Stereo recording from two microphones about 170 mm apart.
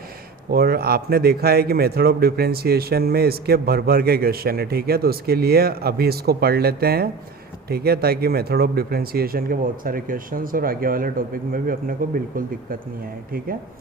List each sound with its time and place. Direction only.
0.5 s a man's voice: 65° right (ahead or behind)